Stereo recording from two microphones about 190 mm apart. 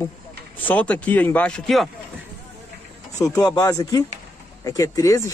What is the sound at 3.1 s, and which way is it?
Speech, 20° left (ahead or behind).